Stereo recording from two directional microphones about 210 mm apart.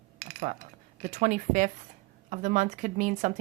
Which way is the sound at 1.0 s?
35° right (ahead or behind).